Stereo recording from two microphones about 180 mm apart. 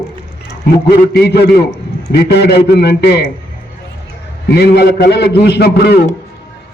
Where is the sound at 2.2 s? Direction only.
65° left (ahead or behind).